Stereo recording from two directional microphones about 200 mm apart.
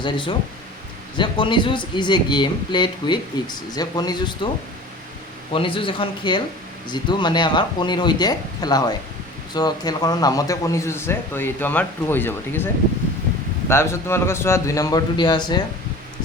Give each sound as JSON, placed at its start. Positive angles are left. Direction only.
{"t": 0.0, "sound": "speech", "side_deg": 25}
{"t": 5.5, "sound": "speech", "side_deg": 25}